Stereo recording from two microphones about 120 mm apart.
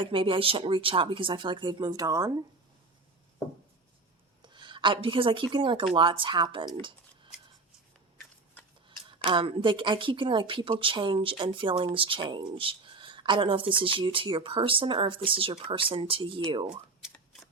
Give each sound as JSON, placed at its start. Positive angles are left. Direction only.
{"t": 0.0, "sound": "speech", "side_deg": -45}
{"t": 4.4, "sound": "speech", "side_deg": -40}
{"t": 8.9, "sound": "speech", "side_deg": -45}
{"t": 17.0, "sound": "a sound", "side_deg": -5}